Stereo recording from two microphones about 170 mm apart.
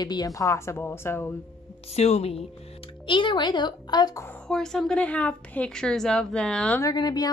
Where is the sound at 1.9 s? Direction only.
40° left (ahead or behind); by 4.3 s 20° left (ahead or behind).